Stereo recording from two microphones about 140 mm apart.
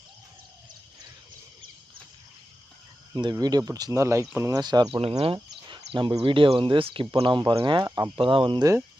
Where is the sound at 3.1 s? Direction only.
30° right (ahead or behind).